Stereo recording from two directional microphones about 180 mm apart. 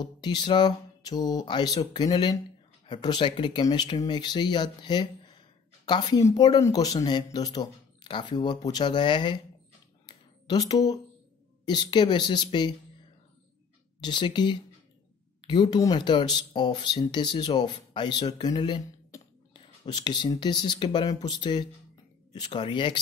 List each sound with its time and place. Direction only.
0.0 s speech: 25° left (ahead or behind)
10.0 s a sound: 25° left (ahead or behind)
11.6 s speech: 25° left (ahead or behind)
14.0 s speech: 25° left (ahead or behind)